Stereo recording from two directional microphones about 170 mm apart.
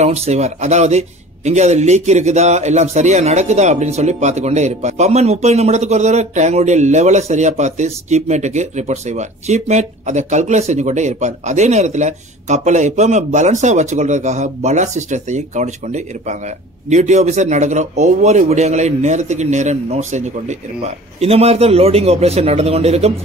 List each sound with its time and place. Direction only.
0.0 s a man's voice: 40° right (ahead or behind)